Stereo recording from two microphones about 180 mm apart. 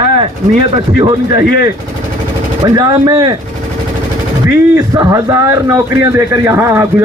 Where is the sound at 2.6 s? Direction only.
20° right (ahead or behind).